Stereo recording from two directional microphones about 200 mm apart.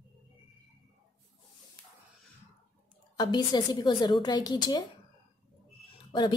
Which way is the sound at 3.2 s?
20° left (ahead or behind).